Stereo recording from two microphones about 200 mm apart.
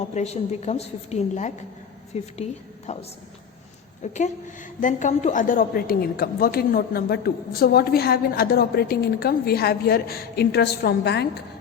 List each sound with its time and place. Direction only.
0.1 s a woman's voice: 35° left (ahead or behind)
4.0 s a woman's voice: 35° left (ahead or behind); by 11.4 s 55° left (ahead or behind)